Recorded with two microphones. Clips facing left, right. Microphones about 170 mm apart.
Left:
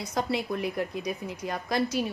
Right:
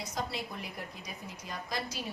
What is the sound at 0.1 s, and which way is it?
A woman's voice, 65° left (ahead or behind).